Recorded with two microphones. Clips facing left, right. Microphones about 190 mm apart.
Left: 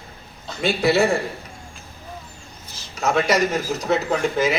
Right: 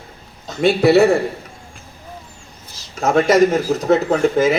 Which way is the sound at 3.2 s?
50° right (ahead or behind).